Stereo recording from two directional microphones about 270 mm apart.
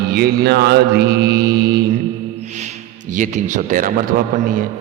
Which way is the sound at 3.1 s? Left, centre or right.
Right.